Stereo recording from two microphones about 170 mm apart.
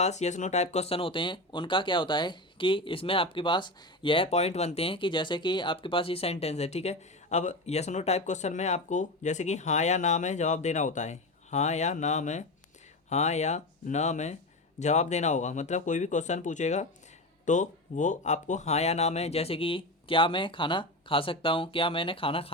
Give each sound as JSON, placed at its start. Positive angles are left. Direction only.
{"t": 0.0, "sound": "speech", "side_deg": 40}